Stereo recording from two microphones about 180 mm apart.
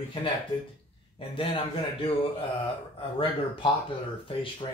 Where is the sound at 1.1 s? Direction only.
30° left (ahead or behind).